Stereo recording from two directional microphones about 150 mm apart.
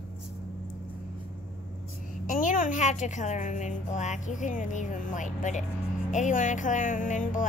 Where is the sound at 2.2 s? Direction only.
60° left (ahead or behind).